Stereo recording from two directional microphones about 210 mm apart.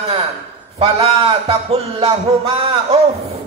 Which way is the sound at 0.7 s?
25° right (ahead or behind).